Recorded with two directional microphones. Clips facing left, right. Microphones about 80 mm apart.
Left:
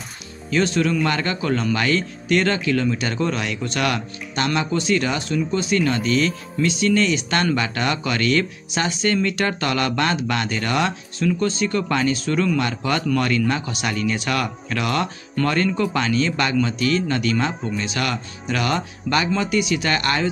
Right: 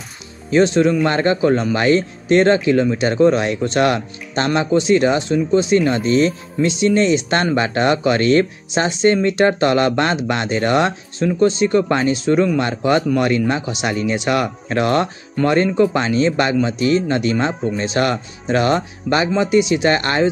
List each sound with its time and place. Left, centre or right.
0.5 s speech: right